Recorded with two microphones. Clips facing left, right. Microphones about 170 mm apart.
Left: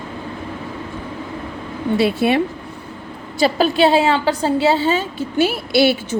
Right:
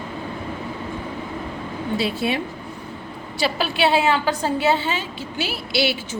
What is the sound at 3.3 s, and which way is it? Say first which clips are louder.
A woman's voice: left 7 dB; 45° left (ahead or behind).